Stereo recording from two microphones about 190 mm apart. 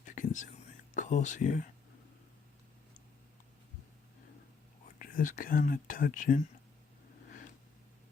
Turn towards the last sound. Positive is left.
turn(degrees=45)  # may be behind; listen again after turning